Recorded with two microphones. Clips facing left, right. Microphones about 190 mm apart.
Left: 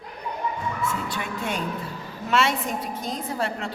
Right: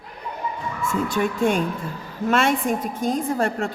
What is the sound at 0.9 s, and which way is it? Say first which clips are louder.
A woman's voice: right 8 dB; 45° right (ahead or behind).